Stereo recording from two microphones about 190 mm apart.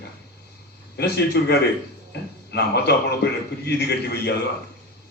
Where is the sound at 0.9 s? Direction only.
60° left (ahead or behind).